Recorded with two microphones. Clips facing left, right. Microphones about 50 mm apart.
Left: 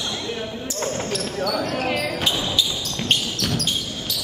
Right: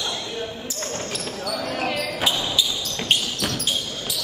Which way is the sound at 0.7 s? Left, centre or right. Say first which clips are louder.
Left 4 dB; centre.